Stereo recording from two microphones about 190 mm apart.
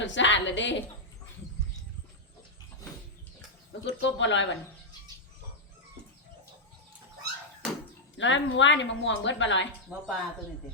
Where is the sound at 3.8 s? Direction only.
70° left (ahead or behind).